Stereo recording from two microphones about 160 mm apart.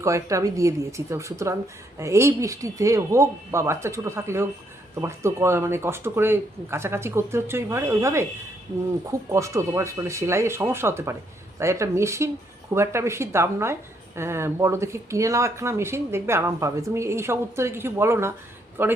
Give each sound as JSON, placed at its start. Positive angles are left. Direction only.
{"t": 0.0, "sound": "speech", "side_deg": -20}
{"t": 9.3, "sound": "speech", "side_deg": -20}